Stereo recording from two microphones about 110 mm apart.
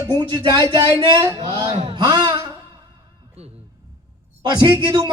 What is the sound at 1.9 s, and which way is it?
Speech, 40° right (ahead or behind).